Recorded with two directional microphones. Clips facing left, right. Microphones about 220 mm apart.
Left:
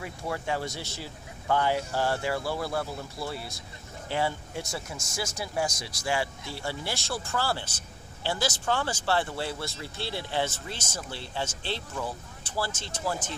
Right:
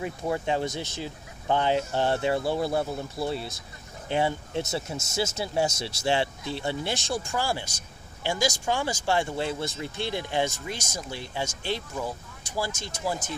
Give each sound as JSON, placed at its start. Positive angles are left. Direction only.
{"t": 0.0, "sound": "speech", "side_deg": -20}